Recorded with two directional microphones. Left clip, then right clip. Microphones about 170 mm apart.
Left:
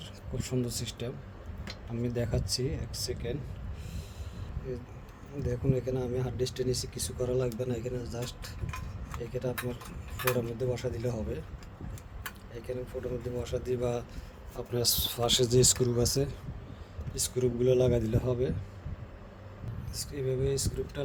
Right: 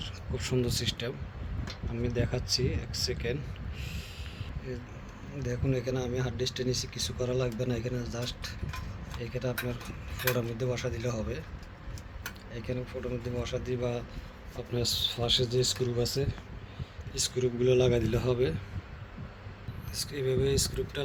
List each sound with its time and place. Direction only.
0.0 s speech: 10° left (ahead or behind)
2.0 s speech: 20° left (ahead or behind)
5.4 s speech: 15° left (ahead or behind)
12.5 s speech: 20° left (ahead or behind)
13.7 s speech: 45° left (ahead or behind)
15.9 s speech: 40° left (ahead or behind)
17.2 s speech: 30° left (ahead or behind); by 18.5 s 5° left (ahead or behind)
19.9 s speech: 10° left (ahead or behind)